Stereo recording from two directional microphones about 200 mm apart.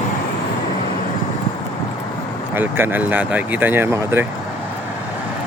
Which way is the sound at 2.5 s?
10° right (ahead or behind).